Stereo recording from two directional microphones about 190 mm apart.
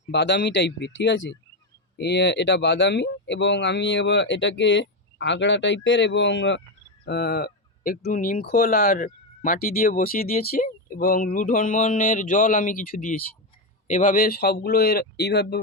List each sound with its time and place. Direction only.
0.1 s speech: 65° left (ahead or behind)
7.0 s speech: 55° left (ahead or behind)